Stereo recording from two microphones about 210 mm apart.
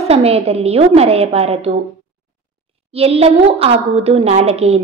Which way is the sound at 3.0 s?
30° right (ahead or behind).